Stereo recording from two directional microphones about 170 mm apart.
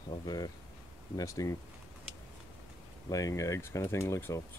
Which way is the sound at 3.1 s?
20° left (ahead or behind).